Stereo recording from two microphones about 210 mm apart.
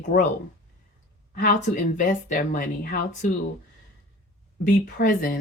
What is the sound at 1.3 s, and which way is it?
Speech, 45° left (ahead or behind).